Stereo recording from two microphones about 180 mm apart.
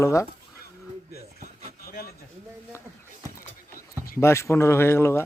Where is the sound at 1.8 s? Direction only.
55° left (ahead or behind).